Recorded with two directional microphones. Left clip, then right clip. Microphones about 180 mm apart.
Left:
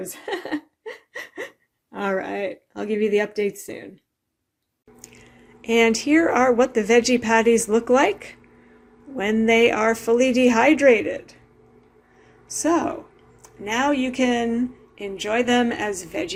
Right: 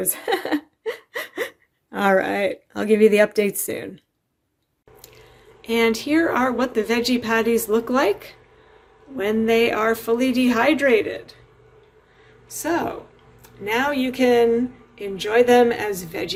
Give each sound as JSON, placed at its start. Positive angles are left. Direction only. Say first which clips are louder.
{"t": 0.0, "sound": "a sound", "louder": "right 6 dB", "side_deg": -40}
{"t": 4.9, "sound": "drip", "louder": "even", "side_deg": 40}
{"t": 5.6, "sound": "speech", "louder": "left 2 dB", "side_deg": 40}
{"t": 12.5, "sound": "a woman's voice", "louder": "left 2 dB", "side_deg": 30}